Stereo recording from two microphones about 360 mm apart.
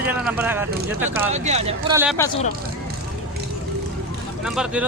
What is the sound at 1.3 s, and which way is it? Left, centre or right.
Speech, centre.